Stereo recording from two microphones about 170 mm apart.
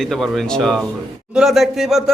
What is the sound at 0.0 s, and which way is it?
A man's voice, centre (ahead or behind).